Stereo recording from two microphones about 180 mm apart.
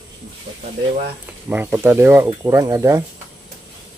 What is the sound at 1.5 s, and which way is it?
Speech, 10° right (ahead or behind).